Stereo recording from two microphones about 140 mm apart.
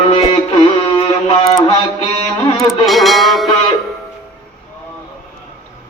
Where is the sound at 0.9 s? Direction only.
40° left (ahead or behind).